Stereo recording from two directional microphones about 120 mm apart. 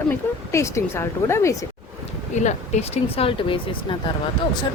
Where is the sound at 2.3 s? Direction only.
80° left; by 3.6 s 50° left (ahead or behind).